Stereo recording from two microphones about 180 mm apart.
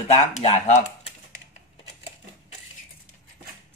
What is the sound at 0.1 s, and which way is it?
Speech, 35° left (ahead or behind).